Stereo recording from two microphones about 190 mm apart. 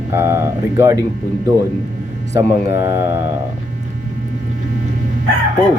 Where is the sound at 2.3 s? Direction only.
15° right (ahead or behind).